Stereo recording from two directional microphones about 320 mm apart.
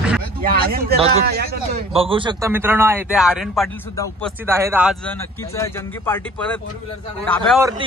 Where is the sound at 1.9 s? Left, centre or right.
Centre.